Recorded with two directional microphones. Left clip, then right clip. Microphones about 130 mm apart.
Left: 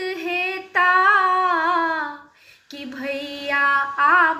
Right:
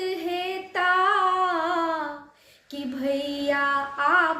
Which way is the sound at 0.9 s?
40° right (ahead or behind).